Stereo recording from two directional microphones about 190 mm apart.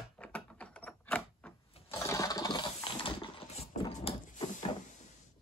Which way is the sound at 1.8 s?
15° left (ahead or behind).